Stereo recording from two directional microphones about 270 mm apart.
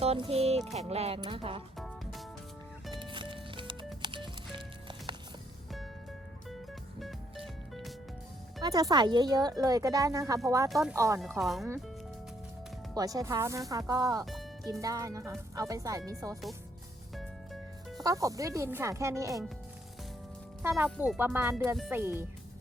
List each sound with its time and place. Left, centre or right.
0.0 s speech: right
2.9 s music: centre
7.0 s music: centre
8.6 s speech: centre
10.7 s speech: centre
10.9 s speech: centre
11.2 s speech: centre
12.9 s speech: centre
14.3 s music: centre
14.7 s speech: centre
17.9 s speech: centre
20.6 s speech: centre